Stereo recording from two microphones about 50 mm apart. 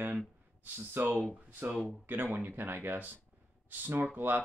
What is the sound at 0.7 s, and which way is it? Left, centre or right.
Speech, right.